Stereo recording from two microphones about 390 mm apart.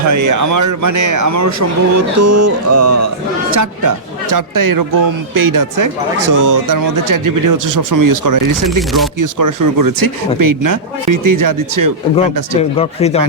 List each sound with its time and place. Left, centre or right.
0.1 s speech: right
12.1 s speech: centre